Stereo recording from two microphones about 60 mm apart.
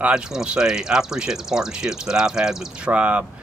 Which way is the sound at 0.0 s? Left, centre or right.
Centre.